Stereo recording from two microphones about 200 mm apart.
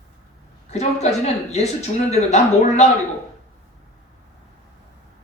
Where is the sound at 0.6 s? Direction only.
35° left (ahead or behind).